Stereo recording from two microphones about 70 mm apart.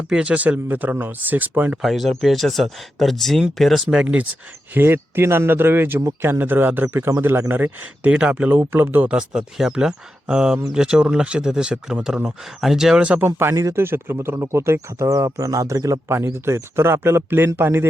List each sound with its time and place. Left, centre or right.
0.1 s speech: centre
1.8 s speech: centre
3.9 s speech: centre
4.7 s speech: right
8.1 s speech: centre
9.1 s speech: centre
13.1 s speech: right
13.8 s speech: right
16.0 s speech: right